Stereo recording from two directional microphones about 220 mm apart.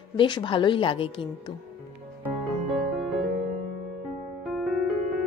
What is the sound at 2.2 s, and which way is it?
Music, centre (ahead or behind).